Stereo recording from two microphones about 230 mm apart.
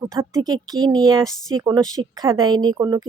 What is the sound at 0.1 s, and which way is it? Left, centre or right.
Speech, centre.